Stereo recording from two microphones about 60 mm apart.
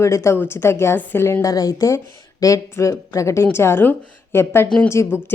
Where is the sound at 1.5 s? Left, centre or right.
Left.